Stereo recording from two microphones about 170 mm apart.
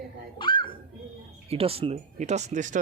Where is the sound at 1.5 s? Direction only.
35° right (ahead or behind).